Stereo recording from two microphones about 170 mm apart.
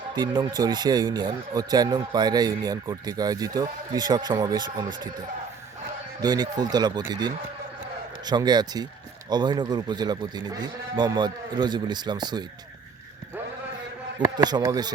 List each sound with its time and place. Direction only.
0.1 s speech: 25° right (ahead or behind)
6.2 s speech: 25° right (ahead or behind)
14.3 s speech: 25° right (ahead or behind)